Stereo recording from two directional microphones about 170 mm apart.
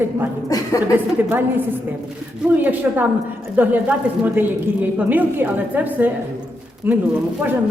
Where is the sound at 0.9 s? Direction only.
10° right (ahead or behind).